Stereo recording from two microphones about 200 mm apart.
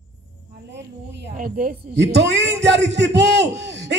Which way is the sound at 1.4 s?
45° right (ahead or behind).